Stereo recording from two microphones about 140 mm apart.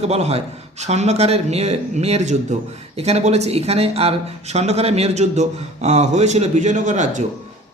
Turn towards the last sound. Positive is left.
turn(degrees=-60)  # may be behind; listen again after turning